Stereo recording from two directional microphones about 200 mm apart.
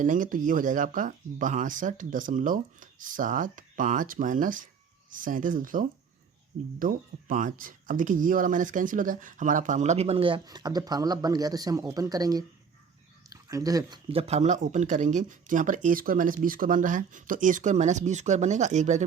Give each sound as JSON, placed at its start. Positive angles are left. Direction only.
{"t": 0.0, "sound": "speech", "side_deg": -40}
{"t": 14.1, "sound": "speech", "side_deg": -30}